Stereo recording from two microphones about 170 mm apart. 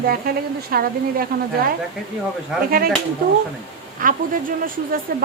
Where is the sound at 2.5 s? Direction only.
5° right (ahead or behind).